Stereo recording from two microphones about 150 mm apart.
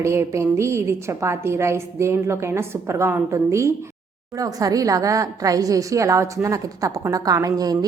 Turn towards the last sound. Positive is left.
turn(degrees=-25)  # may be behind; listen again after turning